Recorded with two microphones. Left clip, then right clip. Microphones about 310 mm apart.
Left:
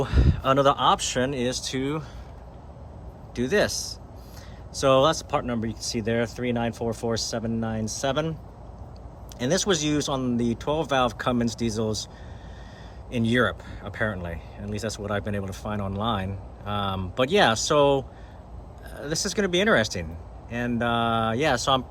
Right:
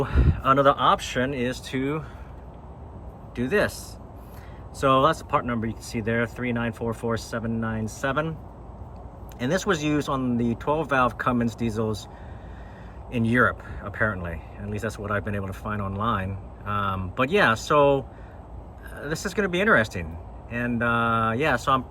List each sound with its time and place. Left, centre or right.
0.0 s speech: centre
3.3 s speech: centre
9.4 s speech: centre
13.1 s speech: centre